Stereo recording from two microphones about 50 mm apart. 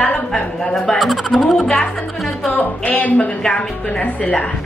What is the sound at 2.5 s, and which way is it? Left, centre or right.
Speech, left.